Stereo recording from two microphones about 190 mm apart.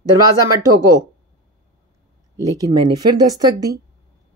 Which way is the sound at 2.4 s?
20° right (ahead or behind).